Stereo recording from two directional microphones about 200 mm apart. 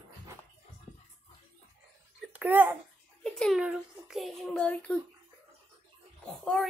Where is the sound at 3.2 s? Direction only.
Centre (ahead or behind).